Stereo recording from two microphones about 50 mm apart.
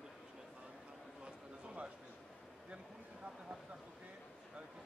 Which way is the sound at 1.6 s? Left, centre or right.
Right.